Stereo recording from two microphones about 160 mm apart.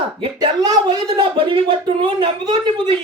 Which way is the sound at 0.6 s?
25° right (ahead or behind).